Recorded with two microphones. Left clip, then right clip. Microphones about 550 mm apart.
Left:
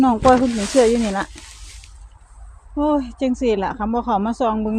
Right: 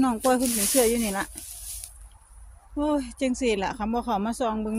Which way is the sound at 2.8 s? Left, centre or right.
Right.